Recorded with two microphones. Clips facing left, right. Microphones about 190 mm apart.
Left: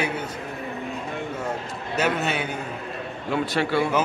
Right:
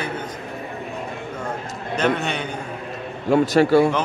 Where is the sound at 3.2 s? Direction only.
45° right (ahead or behind).